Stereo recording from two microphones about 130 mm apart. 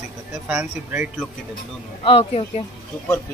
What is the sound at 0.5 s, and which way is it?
Speech, 10° right (ahead or behind).